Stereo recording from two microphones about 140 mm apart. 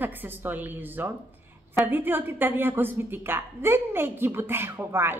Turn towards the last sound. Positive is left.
turn(degrees=-15)  # may be behind; listen again after turning